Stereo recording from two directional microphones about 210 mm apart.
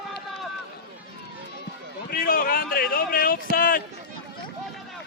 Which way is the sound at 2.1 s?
45° left (ahead or behind).